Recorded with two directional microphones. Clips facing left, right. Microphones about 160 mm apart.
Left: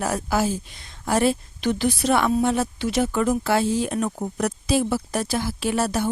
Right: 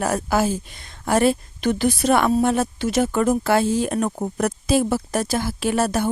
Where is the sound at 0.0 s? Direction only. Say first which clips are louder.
Right 2 dB; 50° right (ahead or behind).